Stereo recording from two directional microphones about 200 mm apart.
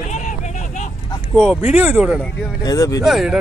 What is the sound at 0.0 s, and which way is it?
Vehicle, 35° left (ahead or behind).